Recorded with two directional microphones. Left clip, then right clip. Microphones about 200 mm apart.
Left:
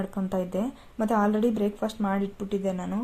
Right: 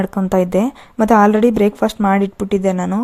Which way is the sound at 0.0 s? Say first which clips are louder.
Right 14 dB; 45° right (ahead or behind).